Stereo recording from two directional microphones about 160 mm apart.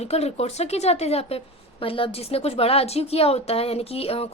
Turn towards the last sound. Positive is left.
turn(degrees=35)  # may be behind; listen again after turning